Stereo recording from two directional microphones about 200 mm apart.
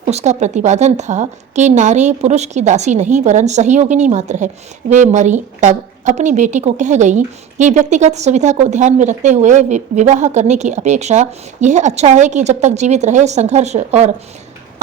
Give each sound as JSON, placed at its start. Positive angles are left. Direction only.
{"t": 0.1, "sound": "a woman's voice", "side_deg": -35}